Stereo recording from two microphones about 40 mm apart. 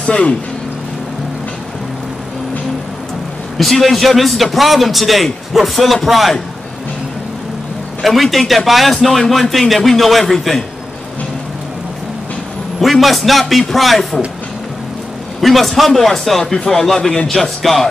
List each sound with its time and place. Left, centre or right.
0.0 s speech: left
3.5 s a man's voice: centre
8.0 s a man's voice: centre
12.8 s a man's voice: centre
15.4 s a man's voice: centre